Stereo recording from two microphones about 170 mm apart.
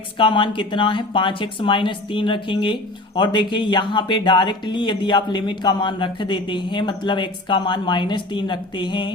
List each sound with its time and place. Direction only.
0.2 s speech: 30° left (ahead or behind)